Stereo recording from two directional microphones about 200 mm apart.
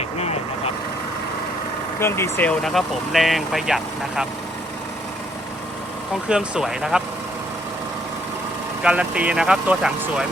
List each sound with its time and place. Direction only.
2.0 s speech: 10° left (ahead or behind)
6.2 s speech: 5° right (ahead or behind)
8.8 s speech: 5° right (ahead or behind)